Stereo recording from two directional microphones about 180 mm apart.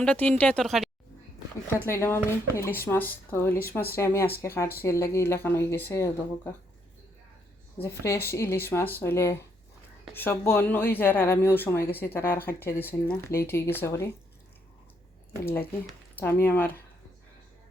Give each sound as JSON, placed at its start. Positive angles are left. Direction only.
{"t": 0.0, "sound": "speech", "side_deg": 5}
{"t": 1.9, "sound": "speech", "side_deg": 15}
{"t": 7.8, "sound": "speech", "side_deg": 15}
{"t": 15.9, "sound": "speech", "side_deg": 10}